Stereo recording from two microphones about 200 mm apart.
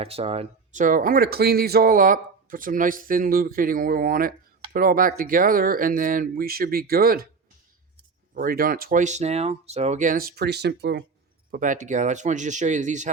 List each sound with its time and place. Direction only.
0.0 s speech: 30° right (ahead or behind); by 7.3 s 50° right (ahead or behind)
8.4 s speech: 45° right (ahead or behind)
11.5 s speech: 40° right (ahead or behind)